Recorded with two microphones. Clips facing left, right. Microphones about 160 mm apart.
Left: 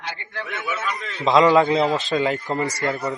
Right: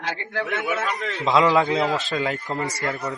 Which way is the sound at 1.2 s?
Centre (ahead or behind).